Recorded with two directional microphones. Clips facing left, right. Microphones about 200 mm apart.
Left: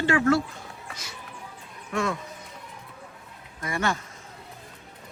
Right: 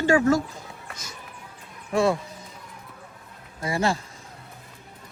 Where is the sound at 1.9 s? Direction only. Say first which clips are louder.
Right 6 dB; 35° right (ahead or behind).